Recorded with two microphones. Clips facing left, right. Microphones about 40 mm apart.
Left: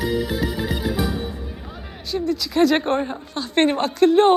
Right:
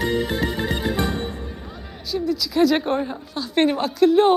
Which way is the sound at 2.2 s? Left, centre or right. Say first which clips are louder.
Left 1 dB; centre.